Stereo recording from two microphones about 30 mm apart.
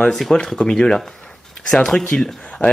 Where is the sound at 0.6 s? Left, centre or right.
Left.